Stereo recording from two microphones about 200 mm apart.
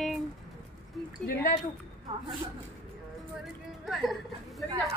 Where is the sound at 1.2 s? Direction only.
40° left (ahead or behind).